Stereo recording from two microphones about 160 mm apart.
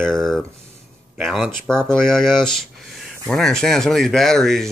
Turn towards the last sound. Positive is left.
turn(degrees=0)  # may be behind; listen again after turning